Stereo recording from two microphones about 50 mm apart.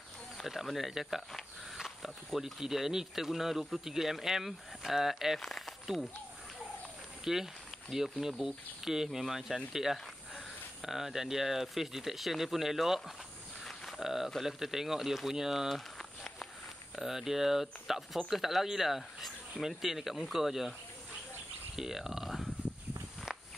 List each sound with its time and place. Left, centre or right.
0.4 s speech: centre
5.4 s snake: centre
7.3 s speech: centre
13.7 s a sound: centre
14.4 s speech: centre
17.0 s speech: centre
21.7 s a sound: centre